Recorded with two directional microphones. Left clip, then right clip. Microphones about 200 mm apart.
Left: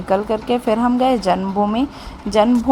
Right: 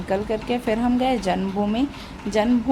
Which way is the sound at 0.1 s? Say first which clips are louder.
Left 6 dB; 20° left (ahead or behind).